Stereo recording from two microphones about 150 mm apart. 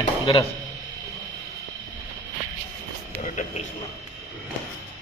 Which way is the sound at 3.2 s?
55° left (ahead or behind).